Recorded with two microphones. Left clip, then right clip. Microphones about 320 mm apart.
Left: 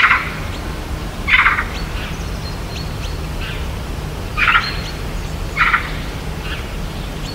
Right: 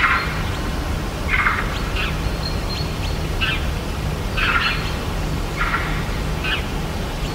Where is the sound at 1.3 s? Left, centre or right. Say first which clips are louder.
Left 8 dB; left.